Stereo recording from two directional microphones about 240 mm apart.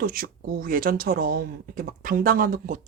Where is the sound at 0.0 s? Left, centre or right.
Right.